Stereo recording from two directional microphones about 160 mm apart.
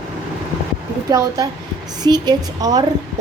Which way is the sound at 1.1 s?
20° right (ahead or behind).